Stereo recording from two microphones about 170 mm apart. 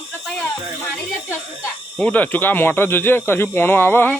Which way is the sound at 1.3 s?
10° left (ahead or behind).